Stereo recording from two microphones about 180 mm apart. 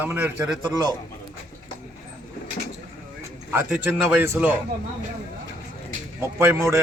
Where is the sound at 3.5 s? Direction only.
10° right (ahead or behind).